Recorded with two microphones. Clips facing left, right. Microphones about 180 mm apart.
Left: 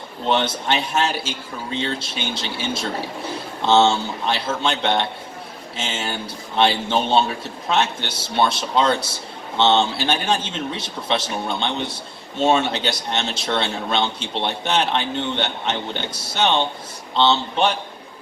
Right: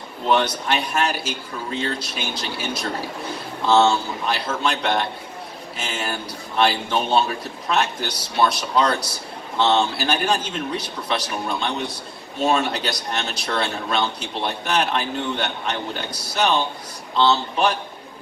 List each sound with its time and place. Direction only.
0.3 s speech: 25° left (ahead or behind)